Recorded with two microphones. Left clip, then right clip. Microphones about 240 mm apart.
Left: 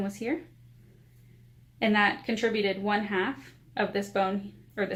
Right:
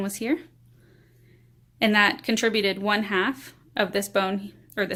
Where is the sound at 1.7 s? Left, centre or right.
Right.